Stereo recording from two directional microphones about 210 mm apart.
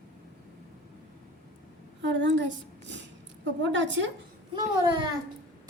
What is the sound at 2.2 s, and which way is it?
Speech, 60° right (ahead or behind).